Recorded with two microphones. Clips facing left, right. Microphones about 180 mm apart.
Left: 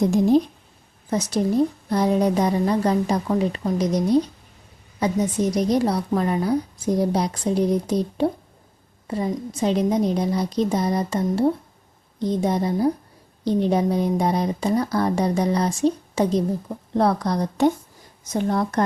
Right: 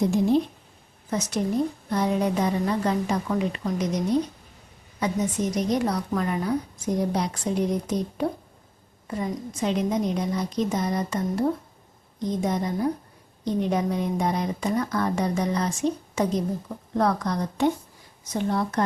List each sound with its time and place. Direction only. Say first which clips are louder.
1.1 s a woman's voice: left 4 dB; 35° left (ahead or behind)
18.3 s speech: left 3 dB; 45° left (ahead or behind)